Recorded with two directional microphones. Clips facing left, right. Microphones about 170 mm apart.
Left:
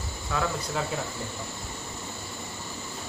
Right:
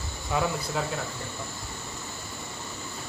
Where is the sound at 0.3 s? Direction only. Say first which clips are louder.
Right 2 dB; 20° right (ahead or behind).